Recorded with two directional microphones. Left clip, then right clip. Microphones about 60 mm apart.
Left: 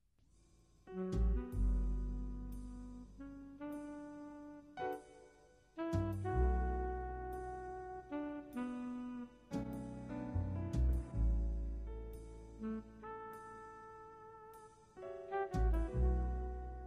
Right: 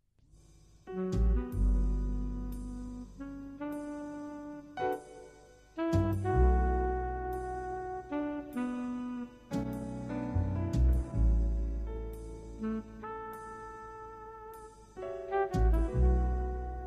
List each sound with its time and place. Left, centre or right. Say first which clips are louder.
0.8 s music: right 7 dB; left